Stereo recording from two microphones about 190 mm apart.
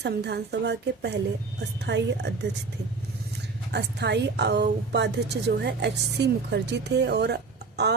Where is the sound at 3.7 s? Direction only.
60° right (ahead or behind).